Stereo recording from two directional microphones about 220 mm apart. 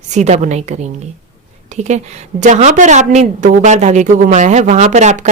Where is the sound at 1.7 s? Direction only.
30° right (ahead or behind).